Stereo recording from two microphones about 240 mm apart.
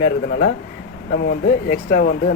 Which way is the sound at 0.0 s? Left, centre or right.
Left.